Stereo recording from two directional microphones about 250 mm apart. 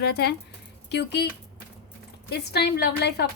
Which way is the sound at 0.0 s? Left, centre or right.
Left.